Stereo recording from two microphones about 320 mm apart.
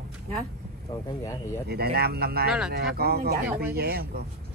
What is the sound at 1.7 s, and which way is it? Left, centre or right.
Speech, right.